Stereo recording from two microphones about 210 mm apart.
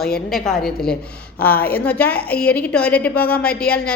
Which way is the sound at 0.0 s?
Centre (ahead or behind).